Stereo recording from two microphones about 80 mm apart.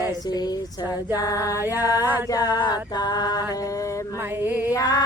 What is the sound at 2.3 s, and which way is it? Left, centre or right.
Music, left.